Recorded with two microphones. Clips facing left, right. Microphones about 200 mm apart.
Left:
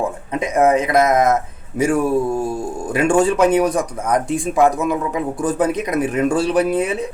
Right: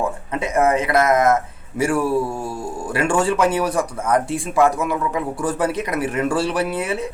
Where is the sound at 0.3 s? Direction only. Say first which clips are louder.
Left 3 dB; 15° left (ahead or behind).